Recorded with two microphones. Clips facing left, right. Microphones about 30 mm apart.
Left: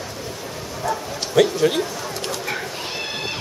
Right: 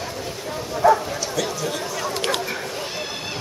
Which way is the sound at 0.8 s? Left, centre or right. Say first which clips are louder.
Right 9 dB; right.